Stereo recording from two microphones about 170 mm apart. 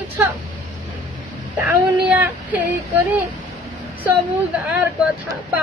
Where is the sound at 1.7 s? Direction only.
10° right (ahead or behind).